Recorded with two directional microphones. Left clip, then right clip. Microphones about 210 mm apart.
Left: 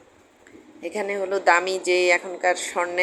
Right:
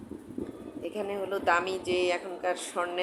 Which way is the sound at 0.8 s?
10° left (ahead or behind).